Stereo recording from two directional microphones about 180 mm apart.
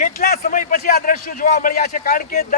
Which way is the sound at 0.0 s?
45° left (ahead or behind).